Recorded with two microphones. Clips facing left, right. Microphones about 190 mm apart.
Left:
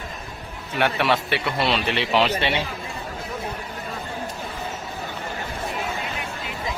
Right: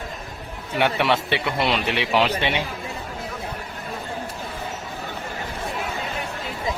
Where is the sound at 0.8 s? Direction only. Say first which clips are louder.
Right 1 dB; 20° right (ahead or behind).